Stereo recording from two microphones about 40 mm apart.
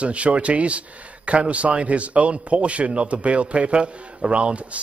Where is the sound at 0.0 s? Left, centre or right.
Right.